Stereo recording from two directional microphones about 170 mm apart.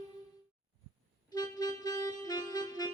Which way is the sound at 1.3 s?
25° left (ahead or behind).